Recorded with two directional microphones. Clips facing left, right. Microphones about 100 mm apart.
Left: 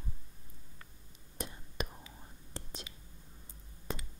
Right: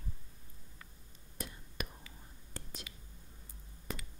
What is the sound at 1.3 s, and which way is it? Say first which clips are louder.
Whispering: left 3 dB; 25° left (ahead or behind).